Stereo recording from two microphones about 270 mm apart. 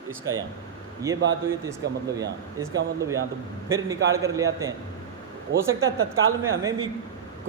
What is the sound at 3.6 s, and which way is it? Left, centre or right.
A man's voice, centre.